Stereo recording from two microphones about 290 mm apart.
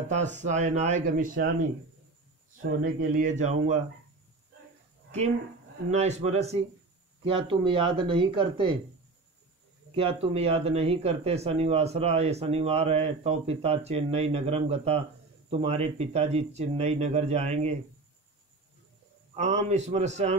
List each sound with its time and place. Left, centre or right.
0.1 s speech: right
2.8 s speech: right
5.9 s a man's voice: right
9.9 s speech: centre
19.3 s speech: right